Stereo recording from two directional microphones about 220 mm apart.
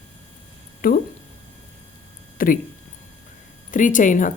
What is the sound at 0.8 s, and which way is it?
Speech, 40° left (ahead or behind).